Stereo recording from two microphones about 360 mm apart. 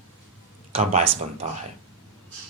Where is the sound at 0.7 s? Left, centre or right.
Centre.